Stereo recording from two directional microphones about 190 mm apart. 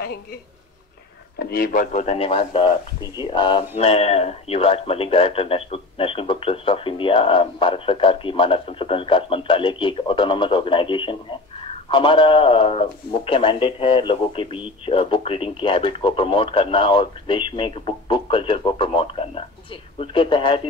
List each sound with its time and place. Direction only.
1.4 s a man's voice: 55° left (ahead or behind); by 20.6 s 25° left (ahead or behind)